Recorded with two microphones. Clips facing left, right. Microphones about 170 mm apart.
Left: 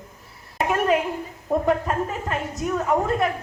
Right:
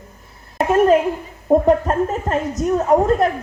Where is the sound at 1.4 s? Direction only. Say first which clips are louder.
Right 7 dB; 35° right (ahead or behind).